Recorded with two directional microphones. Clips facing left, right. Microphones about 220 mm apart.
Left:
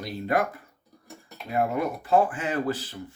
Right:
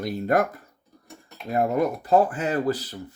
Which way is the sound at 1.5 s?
40° right (ahead or behind).